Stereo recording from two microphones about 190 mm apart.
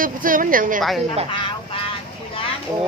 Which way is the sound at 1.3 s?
25° left (ahead or behind).